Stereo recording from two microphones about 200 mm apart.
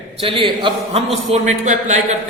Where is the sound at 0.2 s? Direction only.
25° right (ahead or behind).